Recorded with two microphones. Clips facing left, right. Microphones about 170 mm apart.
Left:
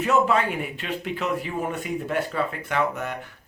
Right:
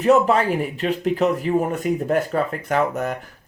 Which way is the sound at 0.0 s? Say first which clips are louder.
Right 5 dB; 35° right (ahead or behind).